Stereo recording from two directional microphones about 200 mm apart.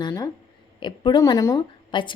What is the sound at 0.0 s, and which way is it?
Speech, 20° left (ahead or behind).